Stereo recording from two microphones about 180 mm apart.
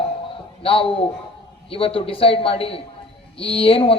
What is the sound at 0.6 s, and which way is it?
A man's voice, 30° left (ahead or behind).